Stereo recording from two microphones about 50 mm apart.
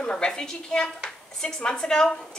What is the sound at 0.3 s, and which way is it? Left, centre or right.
A woman's voice, centre.